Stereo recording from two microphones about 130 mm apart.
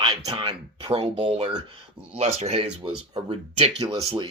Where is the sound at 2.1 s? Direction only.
55° right (ahead or behind).